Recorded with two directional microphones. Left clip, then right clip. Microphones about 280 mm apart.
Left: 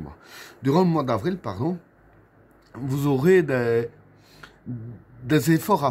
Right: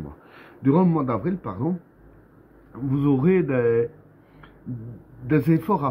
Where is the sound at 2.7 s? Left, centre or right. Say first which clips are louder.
Right 2 dB; left.